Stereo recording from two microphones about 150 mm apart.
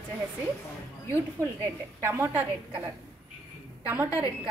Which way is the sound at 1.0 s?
20° right (ahead or behind).